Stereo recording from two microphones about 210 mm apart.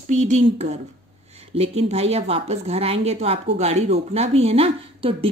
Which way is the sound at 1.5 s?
30° right (ahead or behind).